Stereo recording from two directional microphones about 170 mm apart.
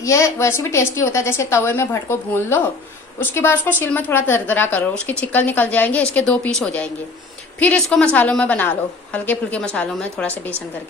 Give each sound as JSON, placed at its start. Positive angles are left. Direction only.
{"t": 0.0, "sound": "a woman's voice", "side_deg": 20}